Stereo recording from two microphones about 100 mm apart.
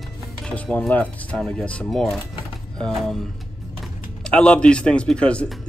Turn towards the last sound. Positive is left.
turn(degrees=10)  # may be behind; listen again after turning